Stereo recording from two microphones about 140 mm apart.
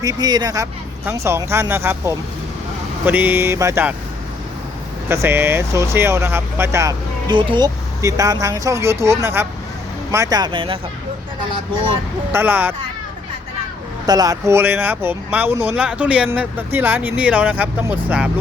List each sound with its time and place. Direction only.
0.0 s speech: 25° right (ahead or behind)
5.0 s speech: 20° right (ahead or behind)
7.3 s speech: 35° right (ahead or behind)
12.3 s speech: 15° right (ahead or behind)
14.1 s speech: 25° right (ahead or behind); by 18.3 s 10° right (ahead or behind)